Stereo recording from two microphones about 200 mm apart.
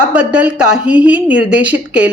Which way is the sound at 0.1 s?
5° right (ahead or behind).